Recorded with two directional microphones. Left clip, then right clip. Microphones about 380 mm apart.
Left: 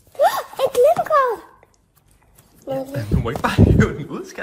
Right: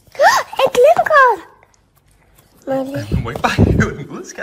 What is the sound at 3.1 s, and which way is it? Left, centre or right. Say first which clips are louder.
Speech: right 2 dB; centre.